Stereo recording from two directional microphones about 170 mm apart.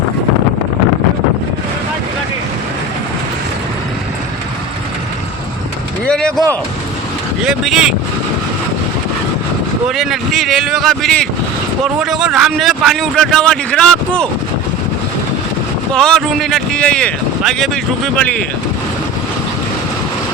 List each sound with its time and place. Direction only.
6.1 s a sound: 5° left (ahead or behind)
7.4 s speech: 5° right (ahead or behind)
9.9 s speech: centre (ahead or behind)
15.9 s speech: 5° left (ahead or behind)